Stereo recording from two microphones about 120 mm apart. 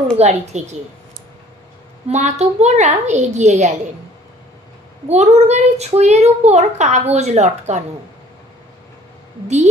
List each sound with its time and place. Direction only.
0.2 s a child's voice: 70° right (ahead or behind)
2.0 s a child's voice: 70° right (ahead or behind)
5.0 s a child's voice: 65° right (ahead or behind)